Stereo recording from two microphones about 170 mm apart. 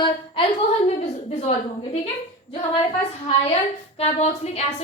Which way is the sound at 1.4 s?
40° left (ahead or behind).